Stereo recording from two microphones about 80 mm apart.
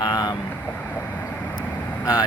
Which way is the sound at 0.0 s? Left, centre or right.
Left.